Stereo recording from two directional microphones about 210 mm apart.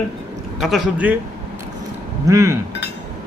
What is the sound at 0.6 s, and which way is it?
Speech, centre (ahead or behind).